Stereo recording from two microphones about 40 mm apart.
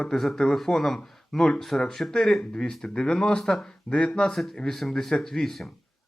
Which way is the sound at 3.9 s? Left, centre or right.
Centre.